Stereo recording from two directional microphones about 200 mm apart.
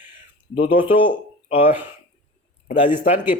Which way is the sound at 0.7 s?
25° left (ahead or behind).